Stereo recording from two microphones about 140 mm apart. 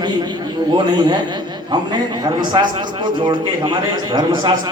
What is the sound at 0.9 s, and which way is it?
Speech, 30° right (ahead or behind).